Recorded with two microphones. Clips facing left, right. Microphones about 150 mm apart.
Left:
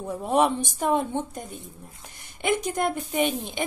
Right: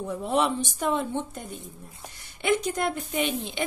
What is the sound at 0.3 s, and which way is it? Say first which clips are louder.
Speech: left 4 dB; 10° left (ahead or behind).